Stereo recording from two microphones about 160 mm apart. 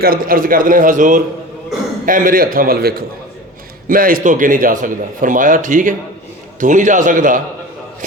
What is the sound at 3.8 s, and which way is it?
A man's voice, 60° right (ahead or behind).